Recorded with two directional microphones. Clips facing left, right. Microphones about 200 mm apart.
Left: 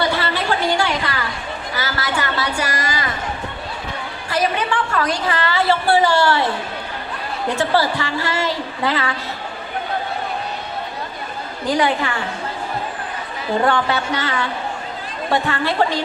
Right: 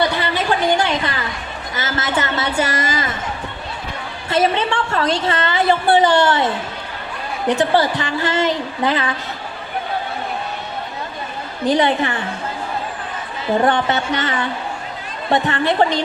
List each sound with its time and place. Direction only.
0.0 s a sound: 20° right (ahead or behind)
1.7 s a woman's voice: 20° right (ahead or behind)
4.3 s a woman's voice: 25° right (ahead or behind)
11.6 s a woman's voice: 20° right (ahead or behind)
13.7 s a woman's voice: 20° right (ahead or behind)